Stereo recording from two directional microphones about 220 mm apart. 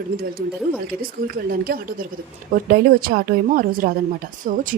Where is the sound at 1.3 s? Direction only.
45° right (ahead or behind).